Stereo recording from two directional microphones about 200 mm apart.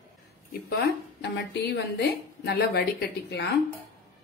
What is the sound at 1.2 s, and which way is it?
A woman's voice, 55° left (ahead or behind).